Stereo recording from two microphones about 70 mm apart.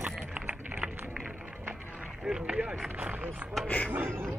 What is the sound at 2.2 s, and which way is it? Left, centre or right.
Speech, centre.